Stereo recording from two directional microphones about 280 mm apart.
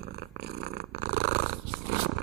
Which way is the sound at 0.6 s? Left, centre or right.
Right.